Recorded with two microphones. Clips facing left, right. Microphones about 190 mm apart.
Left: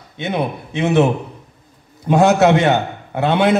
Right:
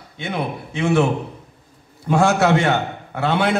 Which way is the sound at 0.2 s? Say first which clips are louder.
Left 4 dB; 20° left (ahead or behind).